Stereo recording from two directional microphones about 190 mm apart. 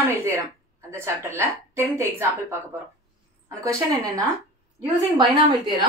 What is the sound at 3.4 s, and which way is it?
Speech, 15° right (ahead or behind).